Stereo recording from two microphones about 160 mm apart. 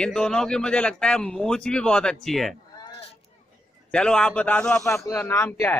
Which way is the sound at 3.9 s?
5° left (ahead or behind).